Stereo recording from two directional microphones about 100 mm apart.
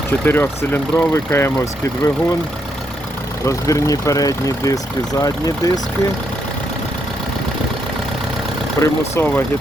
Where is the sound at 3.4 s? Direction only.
35° left (ahead or behind).